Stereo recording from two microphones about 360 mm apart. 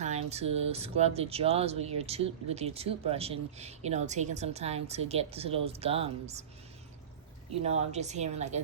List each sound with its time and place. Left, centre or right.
0.0 s speech: centre
7.6 s a woman's voice: centre